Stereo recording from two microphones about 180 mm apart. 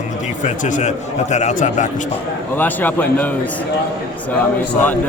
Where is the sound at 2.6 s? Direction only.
10° left (ahead or behind).